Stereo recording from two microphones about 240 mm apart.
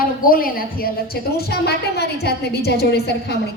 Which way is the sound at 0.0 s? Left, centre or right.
Left.